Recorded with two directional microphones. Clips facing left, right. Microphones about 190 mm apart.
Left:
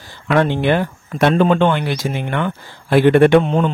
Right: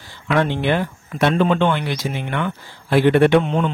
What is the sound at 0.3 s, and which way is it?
Speech, 45° left (ahead or behind).